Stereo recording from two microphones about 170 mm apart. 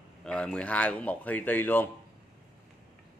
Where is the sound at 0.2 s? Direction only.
5° left (ahead or behind).